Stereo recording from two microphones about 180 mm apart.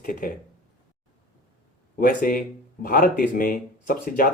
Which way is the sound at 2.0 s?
50° left (ahead or behind).